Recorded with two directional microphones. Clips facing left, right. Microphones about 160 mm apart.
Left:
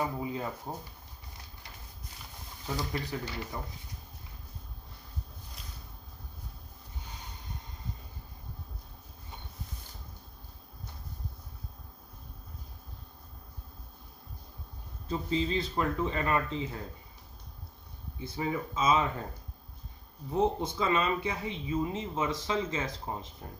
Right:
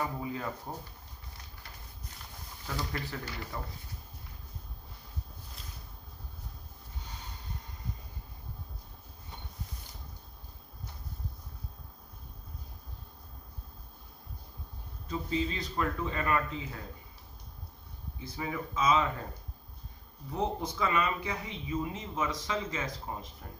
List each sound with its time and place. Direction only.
0.0 s a sound: 15° left (ahead or behind)
0.7 s speech: 15° left (ahead or behind)
2.6 s speech: 15° left (ahead or behind)
15.0 s speech: 25° left (ahead or behind)
18.2 s speech: 25° left (ahead or behind)
20.3 s speech: 25° left (ahead or behind)